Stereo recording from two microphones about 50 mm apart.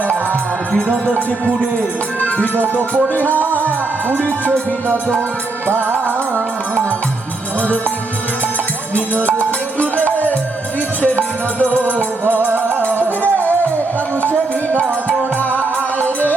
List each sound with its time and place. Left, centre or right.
2.6 s music: right
4.9 s music: left
5.6 s music: right
9.9 s music: left
12.5 s music: right
13.1 s music: left